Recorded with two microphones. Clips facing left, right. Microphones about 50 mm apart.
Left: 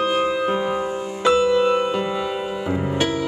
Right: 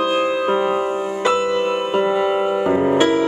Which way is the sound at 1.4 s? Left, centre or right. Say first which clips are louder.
Left 2 dB; right.